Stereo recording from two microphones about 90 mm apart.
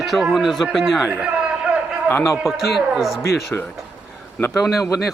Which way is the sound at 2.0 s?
25° left (ahead or behind).